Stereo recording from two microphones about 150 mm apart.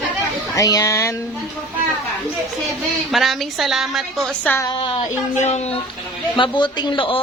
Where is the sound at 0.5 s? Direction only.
25° left (ahead or behind).